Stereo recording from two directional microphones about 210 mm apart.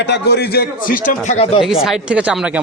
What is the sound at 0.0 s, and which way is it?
A man's voice, 55° left (ahead or behind).